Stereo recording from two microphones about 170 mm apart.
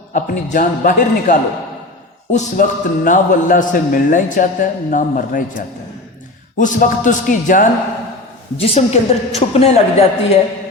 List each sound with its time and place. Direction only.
0.1 s a man's voice: 50° left (ahead or behind)
8.5 s speech: 35° left (ahead or behind)